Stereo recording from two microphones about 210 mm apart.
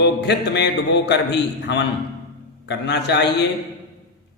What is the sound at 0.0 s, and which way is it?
A man's voice, 55° left (ahead or behind).